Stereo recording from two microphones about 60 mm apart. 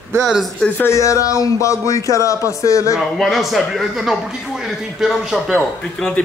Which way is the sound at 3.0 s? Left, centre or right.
Centre.